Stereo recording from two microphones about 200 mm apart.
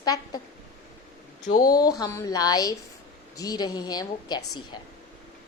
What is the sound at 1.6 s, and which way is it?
A woman's voice, 20° left (ahead or behind).